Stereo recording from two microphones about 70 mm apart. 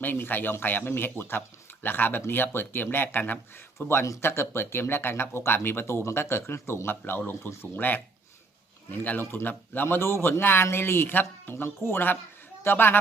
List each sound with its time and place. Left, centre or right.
0.0 s speech: left